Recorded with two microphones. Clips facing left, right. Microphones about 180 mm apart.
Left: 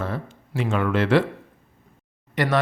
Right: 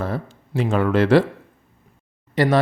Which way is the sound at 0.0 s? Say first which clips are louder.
Right 3 dB; 35° right (ahead or behind).